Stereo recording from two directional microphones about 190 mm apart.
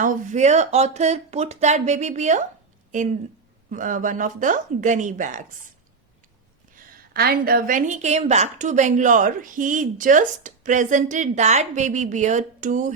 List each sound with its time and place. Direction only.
0.0 s a woman's voice: 40° right (ahead or behind)
6.7 s a woman's voice: 55° right (ahead or behind)